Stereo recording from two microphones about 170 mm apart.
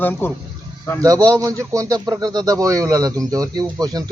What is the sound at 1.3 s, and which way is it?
Speech, 20° right (ahead or behind).